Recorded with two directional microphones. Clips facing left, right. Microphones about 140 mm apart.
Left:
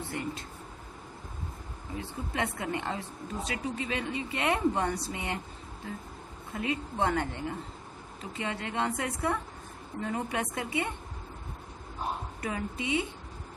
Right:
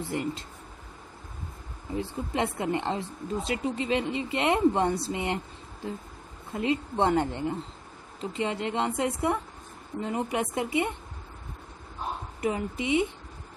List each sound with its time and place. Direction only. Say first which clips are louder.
0.1 s speech: right 6 dB; 25° right (ahead or behind)
2.0 s speech: right 5 dB; 25° right (ahead or behind)
6.5 s speech: right 5 dB; 25° right (ahead or behind)
12.4 s speech: right 5 dB; 20° right (ahead or behind)